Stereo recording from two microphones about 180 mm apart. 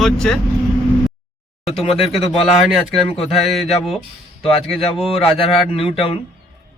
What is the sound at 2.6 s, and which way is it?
Speech, centre (ahead or behind).